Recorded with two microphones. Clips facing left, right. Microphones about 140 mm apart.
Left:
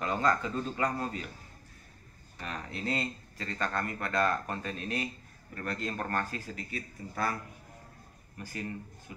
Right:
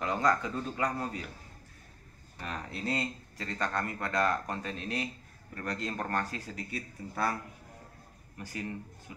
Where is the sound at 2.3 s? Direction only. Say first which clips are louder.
Even; 10° right (ahead or behind).